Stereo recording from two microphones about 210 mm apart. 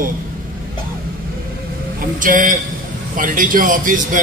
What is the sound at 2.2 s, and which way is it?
A man's voice, 40° right (ahead or behind).